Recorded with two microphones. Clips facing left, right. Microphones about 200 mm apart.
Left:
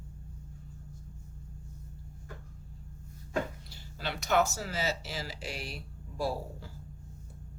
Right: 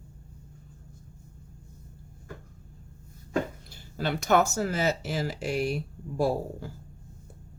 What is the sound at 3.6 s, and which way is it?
Speech, 50° right (ahead or behind).